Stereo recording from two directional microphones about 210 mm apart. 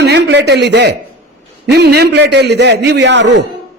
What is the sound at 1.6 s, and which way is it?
A man's voice, 50° right (ahead or behind).